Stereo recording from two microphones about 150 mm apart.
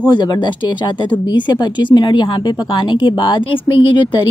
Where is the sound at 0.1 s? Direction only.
30° left (ahead or behind).